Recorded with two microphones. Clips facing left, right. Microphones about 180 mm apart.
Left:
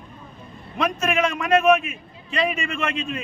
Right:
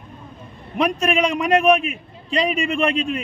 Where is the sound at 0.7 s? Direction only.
15° right (ahead or behind).